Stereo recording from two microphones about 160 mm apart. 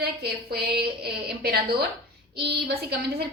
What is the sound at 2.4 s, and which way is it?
Speech, 90° right.